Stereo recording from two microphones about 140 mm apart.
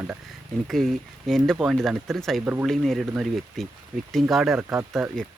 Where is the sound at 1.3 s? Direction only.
Centre (ahead or behind).